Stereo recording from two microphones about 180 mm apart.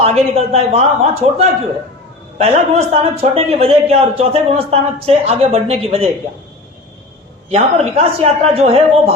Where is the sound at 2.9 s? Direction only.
35° right (ahead or behind).